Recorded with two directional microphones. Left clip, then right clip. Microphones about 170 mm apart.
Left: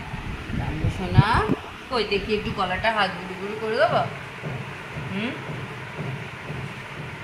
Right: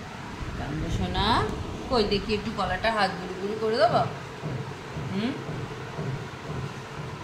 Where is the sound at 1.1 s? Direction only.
20° left (ahead or behind).